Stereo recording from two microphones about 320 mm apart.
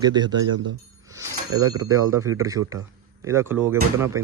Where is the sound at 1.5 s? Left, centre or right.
Right.